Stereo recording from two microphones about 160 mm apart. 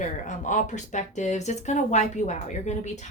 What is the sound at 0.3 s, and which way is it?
Speech, 50° left (ahead or behind).